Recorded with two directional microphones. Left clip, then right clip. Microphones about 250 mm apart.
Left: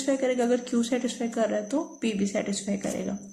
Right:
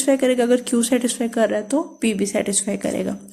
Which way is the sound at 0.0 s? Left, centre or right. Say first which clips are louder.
Right 8 dB; right.